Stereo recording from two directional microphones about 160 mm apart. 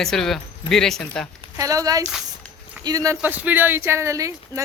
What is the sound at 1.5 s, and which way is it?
Speech, 20° right (ahead or behind).